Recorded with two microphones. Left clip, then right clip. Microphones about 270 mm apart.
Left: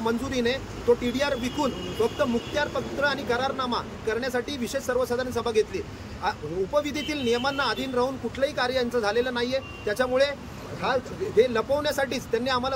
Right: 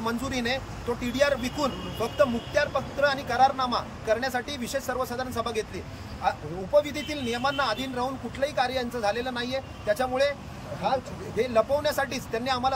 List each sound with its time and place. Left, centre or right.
0.0 s speech: centre